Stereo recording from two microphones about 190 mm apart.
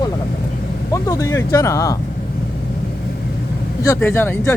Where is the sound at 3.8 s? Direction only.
15° left (ahead or behind).